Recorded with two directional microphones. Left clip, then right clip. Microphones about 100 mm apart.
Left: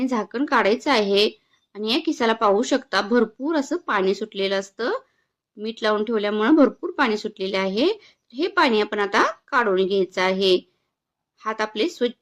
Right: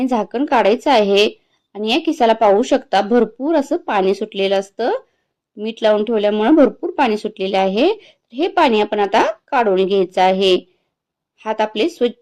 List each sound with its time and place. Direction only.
0.0 s speech: 20° right (ahead or behind)